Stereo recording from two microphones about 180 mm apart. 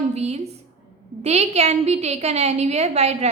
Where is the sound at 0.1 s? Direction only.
35° right (ahead or behind).